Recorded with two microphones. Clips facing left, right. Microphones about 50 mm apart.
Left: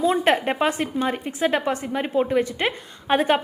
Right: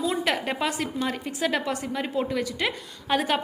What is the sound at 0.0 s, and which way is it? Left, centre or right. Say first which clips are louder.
A woman's voice: left 6 dB; left.